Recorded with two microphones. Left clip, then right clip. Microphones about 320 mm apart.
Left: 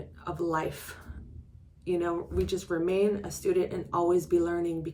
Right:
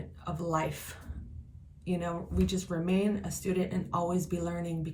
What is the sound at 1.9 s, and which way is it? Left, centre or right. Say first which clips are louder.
A woman's voice: left 6 dB; centre.